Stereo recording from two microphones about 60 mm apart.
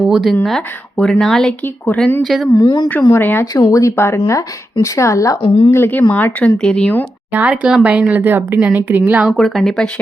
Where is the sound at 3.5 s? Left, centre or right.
Left.